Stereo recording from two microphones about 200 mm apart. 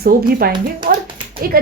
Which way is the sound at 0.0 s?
50° right (ahead or behind).